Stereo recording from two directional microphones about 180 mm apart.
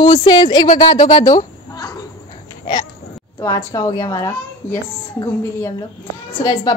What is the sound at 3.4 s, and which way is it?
A child's voice, 20° left (ahead or behind).